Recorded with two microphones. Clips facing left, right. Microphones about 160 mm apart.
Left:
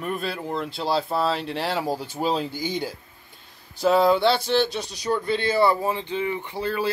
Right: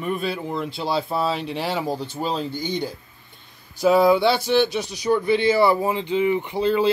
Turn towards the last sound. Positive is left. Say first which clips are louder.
# right 6 dB
turn(degrees=-20)  # may be behind; listen again after turning